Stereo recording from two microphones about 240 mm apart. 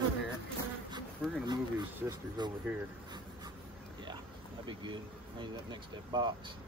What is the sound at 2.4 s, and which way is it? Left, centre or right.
Speech, centre.